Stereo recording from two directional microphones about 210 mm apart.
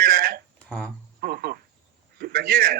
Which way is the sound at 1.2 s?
45° right (ahead or behind).